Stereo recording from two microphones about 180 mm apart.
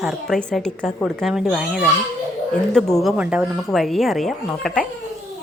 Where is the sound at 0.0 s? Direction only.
Centre (ahead or behind).